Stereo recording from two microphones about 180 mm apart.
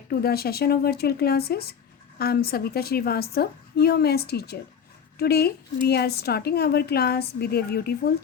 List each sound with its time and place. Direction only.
0.1 s a woman's voice: 60° left (ahead or behind)